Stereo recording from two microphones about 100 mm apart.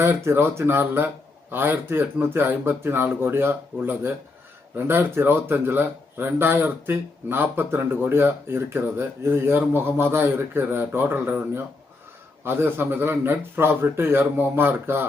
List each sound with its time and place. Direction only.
0.0 s speech: 25° right (ahead or behind)